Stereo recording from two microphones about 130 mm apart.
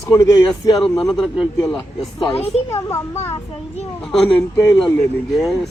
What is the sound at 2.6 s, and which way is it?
Speech, 20° left (ahead or behind).